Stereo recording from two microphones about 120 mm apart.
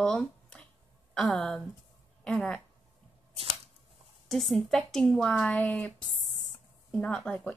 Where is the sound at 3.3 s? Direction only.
55° right (ahead or behind).